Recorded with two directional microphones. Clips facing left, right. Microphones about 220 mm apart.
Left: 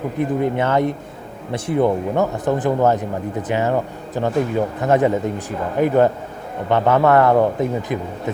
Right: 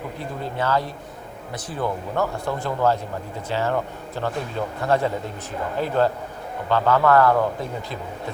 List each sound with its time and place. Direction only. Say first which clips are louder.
0.2 s speech: left 10 dB; 20° left (ahead or behind)